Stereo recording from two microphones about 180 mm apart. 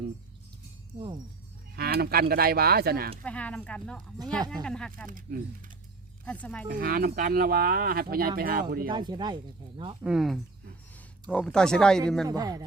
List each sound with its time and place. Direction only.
0.9 s speech: 25° right (ahead or behind)
1.7 s speech: 60° right (ahead or behind)
3.2 s speech: 5° left (ahead or behind)
5.0 s speech: 50° right (ahead or behind)
6.4 s speech: 5° left (ahead or behind)
6.7 s speech: 55° right (ahead or behind)
8.9 s speech: 25° right (ahead or behind)
10.0 s speech: 5° right (ahead or behind)
12.3 s speech: 20° right (ahead or behind)